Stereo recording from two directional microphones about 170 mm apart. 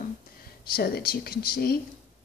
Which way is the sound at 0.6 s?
65° left (ahead or behind).